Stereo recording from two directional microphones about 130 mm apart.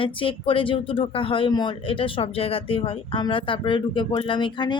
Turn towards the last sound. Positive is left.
turn(degrees=35)  # may be behind; listen again after turning